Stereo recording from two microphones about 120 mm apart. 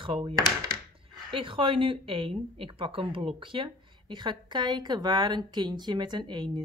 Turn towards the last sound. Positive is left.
turn(degrees=-40)  # may be behind; listen again after turning